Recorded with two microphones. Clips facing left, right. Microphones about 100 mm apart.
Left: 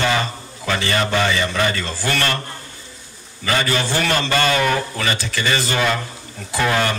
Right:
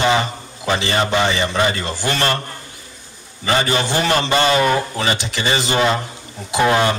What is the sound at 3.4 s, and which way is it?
A man's voice, 25° right (ahead or behind).